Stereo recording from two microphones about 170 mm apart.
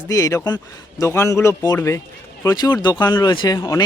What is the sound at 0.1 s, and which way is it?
Speech, 20° left (ahead or behind).